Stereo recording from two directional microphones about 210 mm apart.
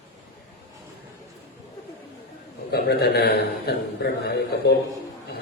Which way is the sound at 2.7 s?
50° left (ahead or behind).